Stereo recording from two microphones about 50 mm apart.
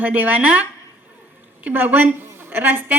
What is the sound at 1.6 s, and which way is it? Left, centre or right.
A woman's voice, right.